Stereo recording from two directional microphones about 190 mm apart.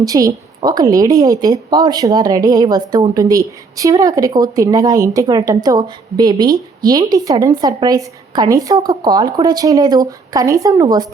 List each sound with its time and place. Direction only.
0.0 s a woman's voice: 20° right (ahead or behind)